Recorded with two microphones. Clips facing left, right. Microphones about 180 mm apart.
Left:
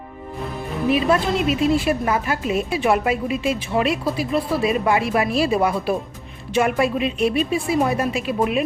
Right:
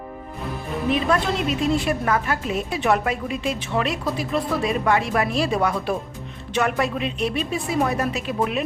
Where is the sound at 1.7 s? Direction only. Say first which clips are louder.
Left 2 dB; 10° left (ahead or behind).